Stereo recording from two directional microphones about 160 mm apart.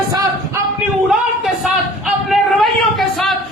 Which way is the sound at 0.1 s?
25° right (ahead or behind).